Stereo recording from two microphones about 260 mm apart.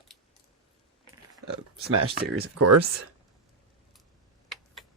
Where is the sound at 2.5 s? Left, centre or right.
Right.